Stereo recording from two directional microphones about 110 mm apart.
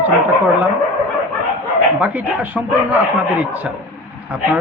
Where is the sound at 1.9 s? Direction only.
15° right (ahead or behind).